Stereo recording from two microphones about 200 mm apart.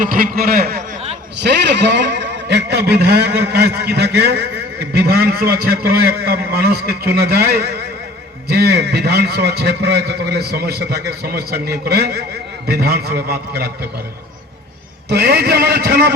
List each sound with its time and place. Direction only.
0.0 s a man's voice: 45° right (ahead or behind)
1.4 s a man's voice: 60° right (ahead or behind)
15.1 s a man's voice: 55° right (ahead or behind)